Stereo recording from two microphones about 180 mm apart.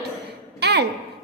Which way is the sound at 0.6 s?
65° right (ahead or behind).